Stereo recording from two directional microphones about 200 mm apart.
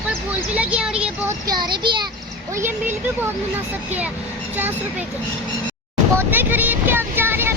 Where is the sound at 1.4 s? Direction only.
20° right (ahead or behind).